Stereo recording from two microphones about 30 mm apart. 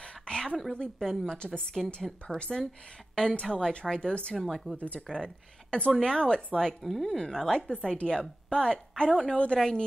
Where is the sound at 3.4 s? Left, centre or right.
Centre.